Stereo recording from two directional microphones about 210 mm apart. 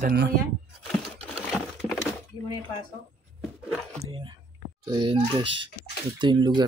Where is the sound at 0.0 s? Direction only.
55° right (ahead or behind).